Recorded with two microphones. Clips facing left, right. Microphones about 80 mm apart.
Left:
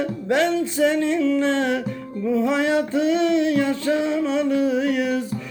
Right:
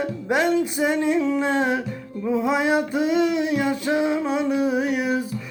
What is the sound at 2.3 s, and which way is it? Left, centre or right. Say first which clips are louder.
Music: left 1 dB; centre.